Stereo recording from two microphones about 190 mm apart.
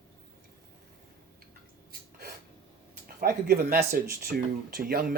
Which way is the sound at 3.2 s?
50° right (ahead or behind).